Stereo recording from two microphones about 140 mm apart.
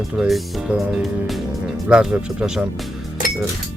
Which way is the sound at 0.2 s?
Centre (ahead or behind).